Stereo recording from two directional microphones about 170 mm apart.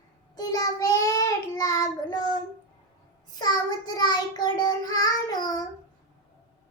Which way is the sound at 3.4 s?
25° left (ahead or behind).